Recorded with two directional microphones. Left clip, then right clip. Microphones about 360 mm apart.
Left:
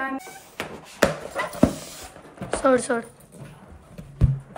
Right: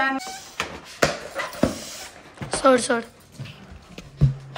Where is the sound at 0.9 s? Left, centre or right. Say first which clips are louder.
Left 1 dB; left.